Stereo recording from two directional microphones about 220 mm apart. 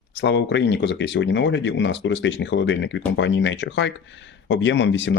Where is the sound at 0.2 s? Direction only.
50° left (ahead or behind).